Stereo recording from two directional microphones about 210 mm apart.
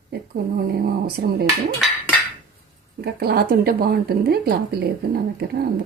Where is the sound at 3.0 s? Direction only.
50° right (ahead or behind).